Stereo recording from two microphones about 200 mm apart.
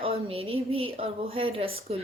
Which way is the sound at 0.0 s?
30° right (ahead or behind).